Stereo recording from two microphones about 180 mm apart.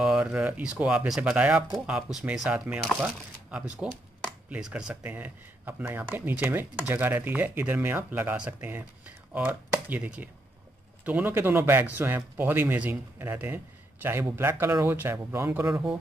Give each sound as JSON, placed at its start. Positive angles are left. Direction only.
{"t": 0.0, "sound": "speech", "side_deg": -5}